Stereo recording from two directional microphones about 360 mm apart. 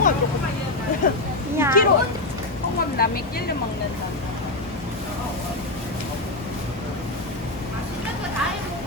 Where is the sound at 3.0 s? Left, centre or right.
Left.